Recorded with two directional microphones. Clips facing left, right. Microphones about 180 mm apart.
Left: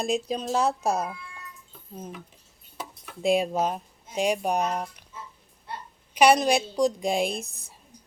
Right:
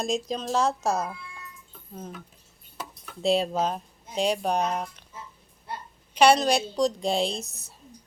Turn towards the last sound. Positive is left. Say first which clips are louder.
# left 1 dB
turn(degrees=15)  # may be behind; listen again after turning